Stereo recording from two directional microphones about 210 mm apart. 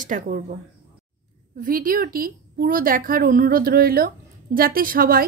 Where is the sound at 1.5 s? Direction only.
40° right (ahead or behind).